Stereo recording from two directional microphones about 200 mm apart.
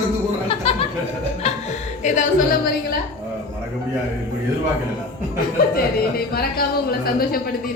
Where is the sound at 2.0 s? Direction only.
40° left (ahead or behind).